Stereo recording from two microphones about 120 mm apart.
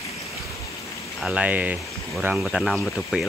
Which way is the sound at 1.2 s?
10° right (ahead or behind).